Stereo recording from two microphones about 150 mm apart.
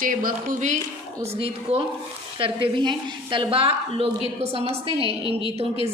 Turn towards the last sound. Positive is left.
turn(degrees=-40)  # may be behind; listen again after turning